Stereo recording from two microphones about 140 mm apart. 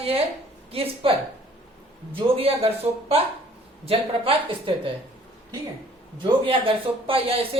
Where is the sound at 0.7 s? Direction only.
45° right (ahead or behind).